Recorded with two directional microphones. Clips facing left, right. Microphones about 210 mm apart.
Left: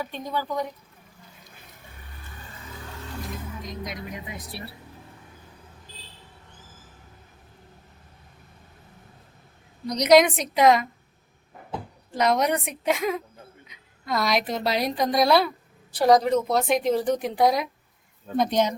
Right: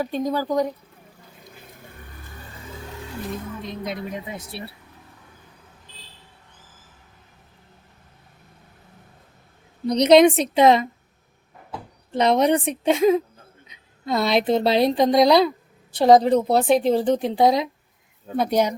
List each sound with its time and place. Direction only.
0.0 s speech: 40° right (ahead or behind)
3.6 s speech: 30° right (ahead or behind)
9.8 s speech: 30° right (ahead or behind)
12.1 s speech: 25° right (ahead or behind)
18.3 s speech: 10° right (ahead or behind)